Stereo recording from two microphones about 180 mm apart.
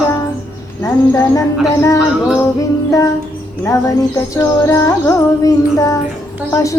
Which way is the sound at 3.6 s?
15° left (ahead or behind).